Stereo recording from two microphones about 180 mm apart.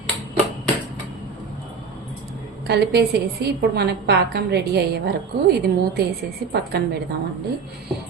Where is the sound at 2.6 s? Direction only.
65° right (ahead or behind).